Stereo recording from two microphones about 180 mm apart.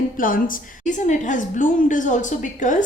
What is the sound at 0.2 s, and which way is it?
Speech, 50° left (ahead or behind).